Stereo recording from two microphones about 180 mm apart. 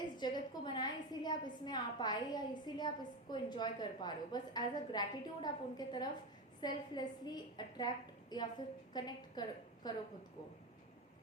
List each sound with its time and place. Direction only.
0.2 s a woman's voice: 25° left (ahead or behind)